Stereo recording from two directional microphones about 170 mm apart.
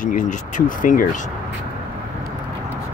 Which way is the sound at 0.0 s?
50° left (ahead or behind).